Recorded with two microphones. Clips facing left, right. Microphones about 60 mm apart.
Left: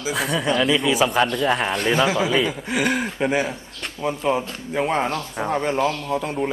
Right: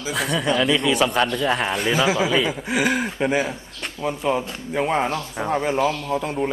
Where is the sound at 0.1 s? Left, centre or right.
Centre.